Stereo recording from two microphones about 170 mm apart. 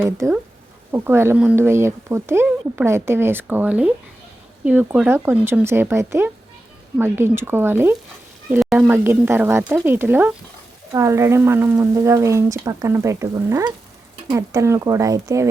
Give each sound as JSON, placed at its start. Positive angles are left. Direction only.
{"t": 0.0, "sound": "speech", "side_deg": -10}
{"t": 8.4, "sound": "speech", "side_deg": 0}
{"t": 8.9, "sound": "speech", "side_deg": -10}